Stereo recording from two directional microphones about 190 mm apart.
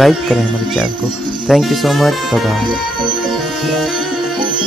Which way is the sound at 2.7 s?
25° right (ahead or behind).